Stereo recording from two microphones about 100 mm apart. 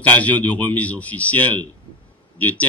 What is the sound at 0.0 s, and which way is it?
Speech, 15° left (ahead or behind).